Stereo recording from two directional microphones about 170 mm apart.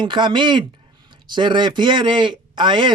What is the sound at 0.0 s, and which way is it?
Speech, 30° right (ahead or behind).